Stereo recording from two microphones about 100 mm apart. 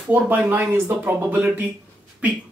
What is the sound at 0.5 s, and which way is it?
Speech, 20° right (ahead or behind).